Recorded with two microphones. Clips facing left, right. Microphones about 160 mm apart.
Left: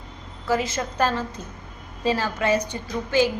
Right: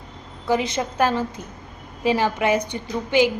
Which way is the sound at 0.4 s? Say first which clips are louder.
Right 2 dB; 20° right (ahead or behind).